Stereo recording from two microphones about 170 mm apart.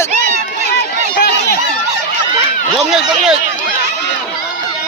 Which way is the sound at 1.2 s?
80° left.